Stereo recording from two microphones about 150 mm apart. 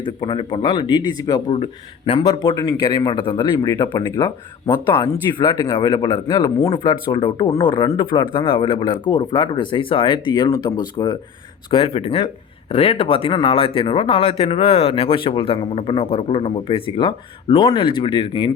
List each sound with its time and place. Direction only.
0.0 s a man's voice: 35° left (ahead or behind)
11.7 s speech: 40° left (ahead or behind)